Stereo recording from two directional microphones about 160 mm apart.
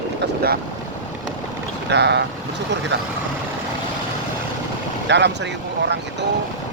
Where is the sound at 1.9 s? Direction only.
90° right.